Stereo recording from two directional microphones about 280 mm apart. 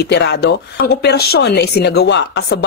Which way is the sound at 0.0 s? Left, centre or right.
Left.